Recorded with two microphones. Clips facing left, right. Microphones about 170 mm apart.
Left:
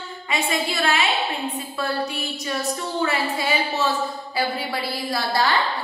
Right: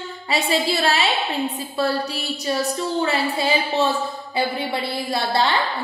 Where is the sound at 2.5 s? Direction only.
30° right (ahead or behind).